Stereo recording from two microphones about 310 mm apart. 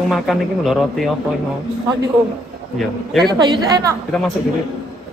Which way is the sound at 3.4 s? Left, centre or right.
Centre.